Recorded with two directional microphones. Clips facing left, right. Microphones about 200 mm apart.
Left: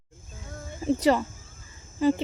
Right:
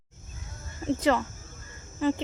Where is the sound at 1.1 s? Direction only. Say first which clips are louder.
Left 2 dB; 15° left (ahead or behind).